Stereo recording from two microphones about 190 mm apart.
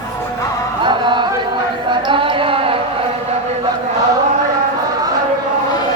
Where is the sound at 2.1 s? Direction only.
25° right (ahead or behind).